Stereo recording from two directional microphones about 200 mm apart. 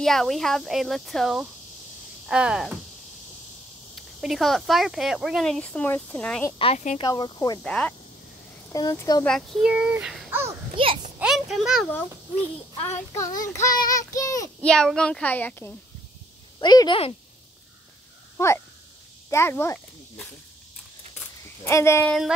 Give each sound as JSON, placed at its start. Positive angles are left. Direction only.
{"t": 0.0, "sound": "speech", "side_deg": 0}
{"t": 3.9, "sound": "speech", "side_deg": 0}
{"t": 6.6, "sound": "speech", "side_deg": 35}
{"t": 7.0, "sound": "speech", "side_deg": 25}
{"t": 7.6, "sound": "speech", "side_deg": 5}
{"t": 8.7, "sound": "speech", "side_deg": 20}
{"t": 9.2, "sound": "speech", "side_deg": 0}
{"t": 10.8, "sound": "a child's voice", "side_deg": -25}
{"t": 11.1, "sound": "speech", "side_deg": -5}
{"t": 13.1, "sound": "child singing", "side_deg": 15}
{"t": 14.6, "sound": "speech", "side_deg": 5}
{"t": 16.5, "sound": "speech", "side_deg": 20}
{"t": 19.3, "sound": "speech", "side_deg": 10}
{"t": 21.2, "sound": "a sound", "side_deg": 15}